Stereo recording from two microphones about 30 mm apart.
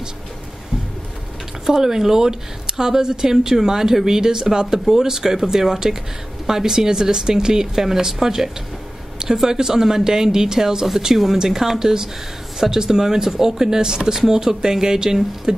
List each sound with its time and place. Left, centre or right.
1.7 s speech: centre